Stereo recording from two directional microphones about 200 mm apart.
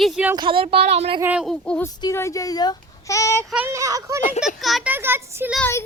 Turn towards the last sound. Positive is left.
turn(degrees=10)  # may be behind; listen again after turning